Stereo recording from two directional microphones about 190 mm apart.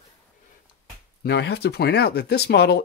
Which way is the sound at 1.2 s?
60° left (ahead or behind).